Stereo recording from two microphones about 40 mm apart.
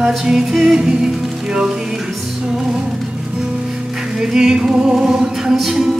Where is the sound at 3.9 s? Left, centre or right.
Centre.